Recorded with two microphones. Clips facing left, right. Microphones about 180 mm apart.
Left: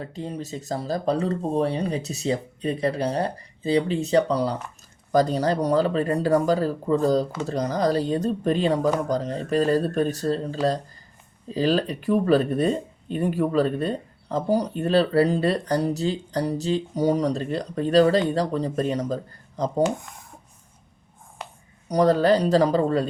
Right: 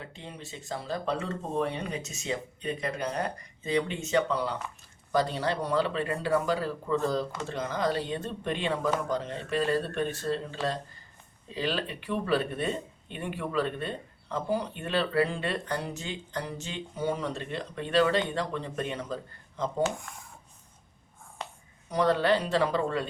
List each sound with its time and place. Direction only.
0.0 s speech: 40° left (ahead or behind)
21.8 s speech: 40° left (ahead or behind)